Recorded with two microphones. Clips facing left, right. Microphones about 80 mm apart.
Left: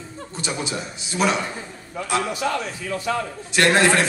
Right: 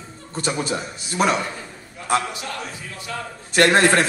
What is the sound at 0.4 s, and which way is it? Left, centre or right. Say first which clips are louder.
Speech: right 4 dB; right.